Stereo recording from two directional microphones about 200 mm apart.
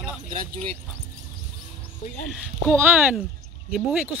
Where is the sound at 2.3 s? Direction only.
Centre (ahead or behind).